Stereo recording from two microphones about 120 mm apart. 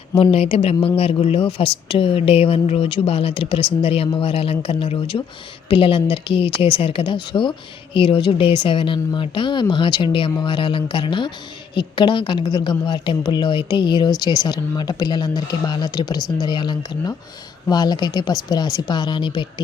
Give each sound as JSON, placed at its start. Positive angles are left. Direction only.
{"t": 0.2, "sound": "a woman's voice", "side_deg": 55}